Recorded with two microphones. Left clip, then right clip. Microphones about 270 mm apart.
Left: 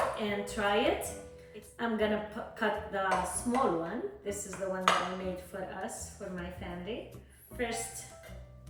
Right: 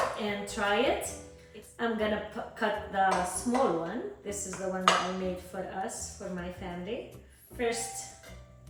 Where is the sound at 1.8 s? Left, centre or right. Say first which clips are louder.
Right 1 dB; centre.